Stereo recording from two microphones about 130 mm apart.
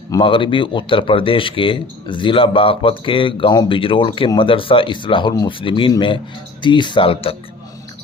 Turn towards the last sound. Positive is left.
turn(degrees=45)  # may be behind; listen again after turning